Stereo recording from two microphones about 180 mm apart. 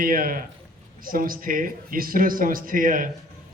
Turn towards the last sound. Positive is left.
turn(degrees=-50)  # may be behind; listen again after turning